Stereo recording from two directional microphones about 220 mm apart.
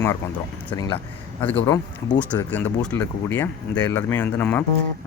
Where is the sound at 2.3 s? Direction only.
10° left (ahead or behind).